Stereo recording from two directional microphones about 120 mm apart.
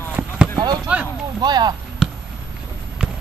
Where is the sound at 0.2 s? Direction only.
10° right (ahead or behind).